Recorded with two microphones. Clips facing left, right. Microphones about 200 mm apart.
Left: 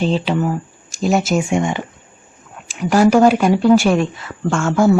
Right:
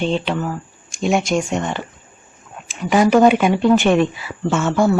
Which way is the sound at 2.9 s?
Centre (ahead or behind).